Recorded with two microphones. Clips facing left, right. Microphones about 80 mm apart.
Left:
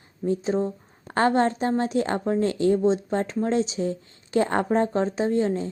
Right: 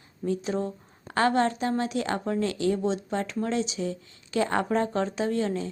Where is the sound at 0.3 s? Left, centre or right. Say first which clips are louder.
Left 4 dB; left.